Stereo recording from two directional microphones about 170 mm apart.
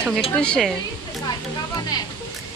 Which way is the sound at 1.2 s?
25° left (ahead or behind).